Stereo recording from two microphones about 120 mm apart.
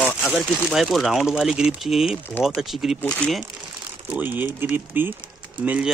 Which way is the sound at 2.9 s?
10° left (ahead or behind).